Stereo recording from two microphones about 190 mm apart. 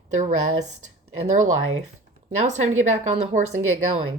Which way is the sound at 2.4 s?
40° right (ahead or behind).